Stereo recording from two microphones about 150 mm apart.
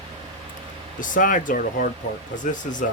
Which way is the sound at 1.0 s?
60° left (ahead or behind).